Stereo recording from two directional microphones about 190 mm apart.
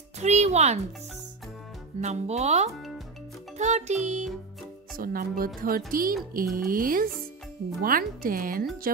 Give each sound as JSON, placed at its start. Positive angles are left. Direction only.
{"t": 0.2, "sound": "a sound", "side_deg": -35}
{"t": 2.0, "sound": "music", "side_deg": -35}
{"t": 4.9, "sound": "speech", "side_deg": -50}